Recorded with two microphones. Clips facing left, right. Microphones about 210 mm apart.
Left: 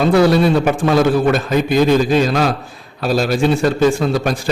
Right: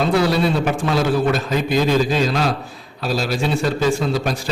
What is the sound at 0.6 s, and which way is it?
Speech, 55° left (ahead or behind).